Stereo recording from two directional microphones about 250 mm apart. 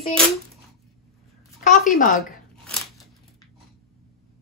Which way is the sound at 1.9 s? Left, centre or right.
Left.